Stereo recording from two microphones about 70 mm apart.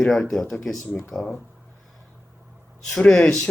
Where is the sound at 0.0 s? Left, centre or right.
Centre.